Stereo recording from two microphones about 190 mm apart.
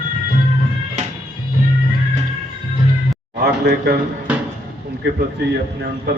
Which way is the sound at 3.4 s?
55° right (ahead or behind).